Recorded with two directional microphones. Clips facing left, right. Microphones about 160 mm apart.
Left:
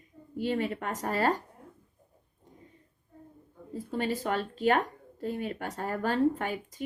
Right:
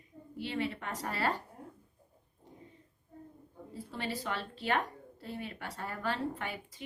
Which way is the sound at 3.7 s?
45° left (ahead or behind).